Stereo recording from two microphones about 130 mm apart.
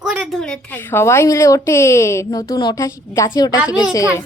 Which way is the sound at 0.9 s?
20° left (ahead or behind).